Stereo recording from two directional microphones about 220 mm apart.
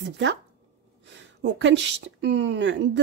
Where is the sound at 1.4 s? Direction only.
55° right (ahead or behind).